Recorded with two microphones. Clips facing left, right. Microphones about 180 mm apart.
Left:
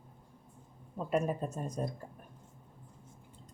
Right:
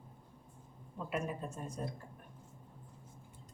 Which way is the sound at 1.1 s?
40° left (ahead or behind).